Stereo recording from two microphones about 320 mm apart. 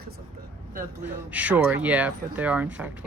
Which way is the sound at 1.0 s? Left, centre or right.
Centre.